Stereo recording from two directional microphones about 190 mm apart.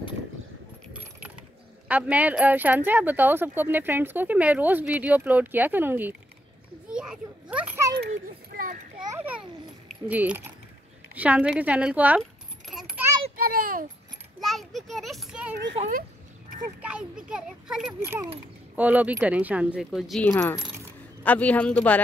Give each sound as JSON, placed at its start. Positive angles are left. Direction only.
{"t": 1.9, "sound": "speech", "side_deg": -10}
{"t": 6.9, "sound": "children playing", "side_deg": -5}
{"t": 8.5, "sound": "children playing", "side_deg": -50}
{"t": 9.1, "sound": "a child's voice", "side_deg": -10}
{"t": 12.2, "sound": "keys jangling", "side_deg": 0}
{"t": 13.4, "sound": "a sound", "side_deg": -50}
{"t": 14.4, "sound": "a child's voice", "side_deg": 0}
{"t": 16.8, "sound": "a child's voice", "side_deg": -5}
{"t": 20.2, "sound": "speech", "side_deg": 15}